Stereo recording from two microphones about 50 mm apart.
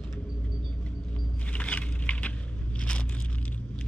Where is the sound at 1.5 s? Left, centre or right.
Left.